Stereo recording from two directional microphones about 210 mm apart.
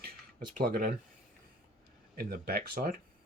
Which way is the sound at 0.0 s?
40° right (ahead or behind).